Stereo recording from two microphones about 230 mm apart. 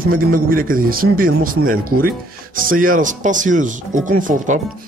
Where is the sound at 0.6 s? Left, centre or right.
Right.